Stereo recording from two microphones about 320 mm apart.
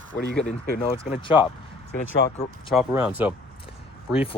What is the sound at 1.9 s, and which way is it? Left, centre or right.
Speech, left.